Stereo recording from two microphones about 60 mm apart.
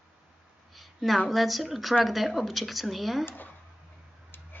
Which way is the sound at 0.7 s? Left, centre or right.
Centre.